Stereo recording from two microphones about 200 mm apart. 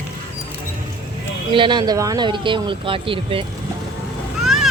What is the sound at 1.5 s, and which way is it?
Speech, 25° right (ahead or behind).